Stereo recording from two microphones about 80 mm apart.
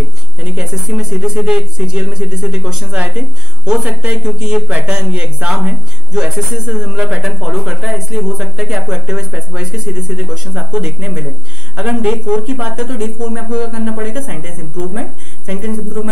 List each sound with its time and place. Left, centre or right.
0.4 s speech: centre
3.0 s speech: centre
7.2 s speech: centre